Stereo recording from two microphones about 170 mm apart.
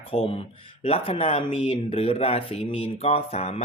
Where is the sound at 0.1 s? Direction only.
35° left (ahead or behind).